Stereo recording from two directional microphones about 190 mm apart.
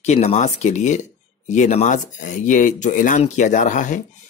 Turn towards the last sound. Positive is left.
turn(degrees=40)  # may be behind; listen again after turning